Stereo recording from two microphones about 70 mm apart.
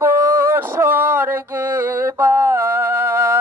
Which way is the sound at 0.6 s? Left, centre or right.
Right.